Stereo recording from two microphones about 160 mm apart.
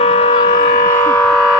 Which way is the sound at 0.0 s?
40° left (ahead or behind).